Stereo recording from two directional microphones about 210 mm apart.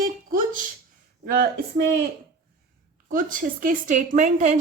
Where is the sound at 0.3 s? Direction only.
40° right (ahead or behind).